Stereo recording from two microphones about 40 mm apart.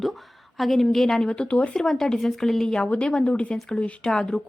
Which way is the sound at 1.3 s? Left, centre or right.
Left.